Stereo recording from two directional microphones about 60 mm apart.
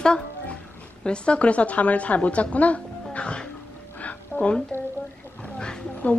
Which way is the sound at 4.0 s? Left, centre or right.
Left.